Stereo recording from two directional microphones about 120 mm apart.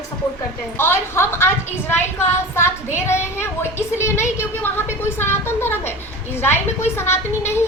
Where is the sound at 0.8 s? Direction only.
20° left (ahead or behind).